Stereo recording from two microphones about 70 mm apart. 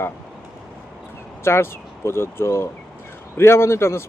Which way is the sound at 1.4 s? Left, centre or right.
Left.